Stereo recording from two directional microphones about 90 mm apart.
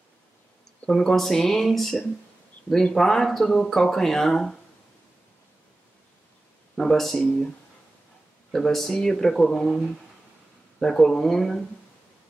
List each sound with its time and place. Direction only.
0.8 s speech: 5° left (ahead or behind)
6.8 s speech: 5° left (ahead or behind)
8.5 s speech: 5° left (ahead or behind)